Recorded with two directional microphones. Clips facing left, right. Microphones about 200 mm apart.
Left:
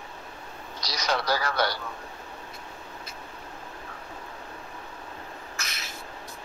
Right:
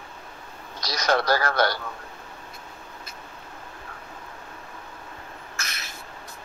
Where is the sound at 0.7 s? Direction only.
50° right (ahead or behind).